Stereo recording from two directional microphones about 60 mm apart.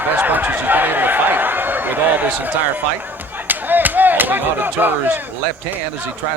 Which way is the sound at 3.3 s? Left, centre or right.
Right.